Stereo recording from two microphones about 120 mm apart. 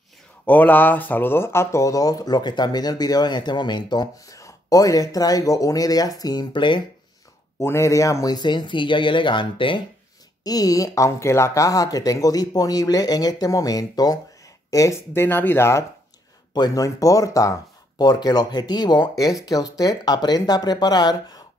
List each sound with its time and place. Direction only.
0.5 s speech: 15° left (ahead or behind); by 6.8 s 40° left (ahead or behind)
7.5 s speech: 25° left (ahead or behind); by 9.8 s 45° left (ahead or behind)
10.4 s speech: 30° left (ahead or behind)
16.5 s speech: 35° left (ahead or behind)